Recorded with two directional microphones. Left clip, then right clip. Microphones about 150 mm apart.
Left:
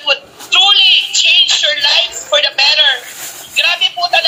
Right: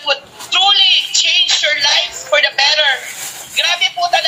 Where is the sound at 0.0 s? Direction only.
15° right (ahead or behind).